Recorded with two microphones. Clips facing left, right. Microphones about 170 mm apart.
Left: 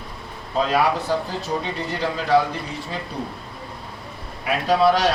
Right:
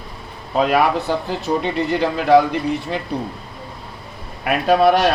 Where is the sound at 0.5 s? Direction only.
65° right (ahead or behind).